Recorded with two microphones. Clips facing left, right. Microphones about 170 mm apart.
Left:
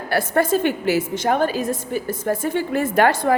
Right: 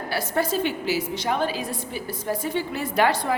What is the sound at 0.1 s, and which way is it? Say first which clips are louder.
A woman's voice: left 7 dB; 50° left (ahead or behind).